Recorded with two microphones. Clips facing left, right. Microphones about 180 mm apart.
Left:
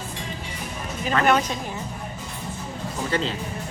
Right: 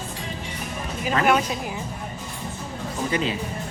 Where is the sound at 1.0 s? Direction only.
5° right (ahead or behind).